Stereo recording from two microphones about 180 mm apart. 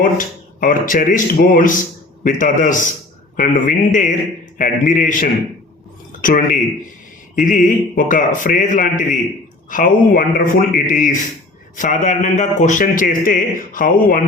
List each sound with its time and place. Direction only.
0.0 s a man's voice: 50° left (ahead or behind)